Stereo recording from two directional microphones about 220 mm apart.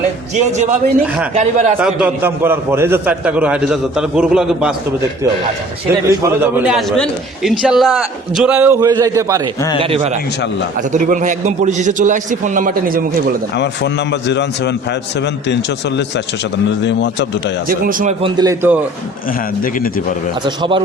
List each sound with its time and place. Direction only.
0.3 s a man's voice: 35° right (ahead or behind)
1.0 s a man's voice: 5° right (ahead or behind)
1.3 s a man's voice: 30° right (ahead or behind)
1.8 s a man's voice: 5° right (ahead or behind)
6.1 s a man's voice: 10° right (ahead or behind)
9.6 s speech: 15° left (ahead or behind)
9.8 s a man's voice: 25° right (ahead or behind)
13.6 s a man's voice: 50° left (ahead or behind)
16.8 s a man's voice: 55° left (ahead or behind)
17.7 s a man's voice: 40° right (ahead or behind)
18.3 s a man's voice: 10° right (ahead or behind)
19.6 s a man's voice: 40° left (ahead or behind)
20.6 s a man's voice: 25° right (ahead or behind)